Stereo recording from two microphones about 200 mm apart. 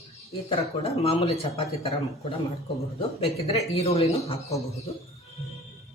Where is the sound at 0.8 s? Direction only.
30° left (ahead or behind).